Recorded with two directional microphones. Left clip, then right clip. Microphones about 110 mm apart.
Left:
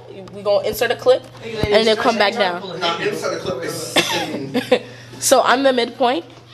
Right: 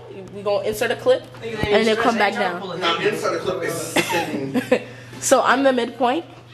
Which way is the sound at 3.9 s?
15° left (ahead or behind).